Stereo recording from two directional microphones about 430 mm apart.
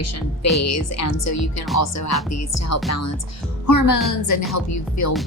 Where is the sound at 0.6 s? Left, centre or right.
Left.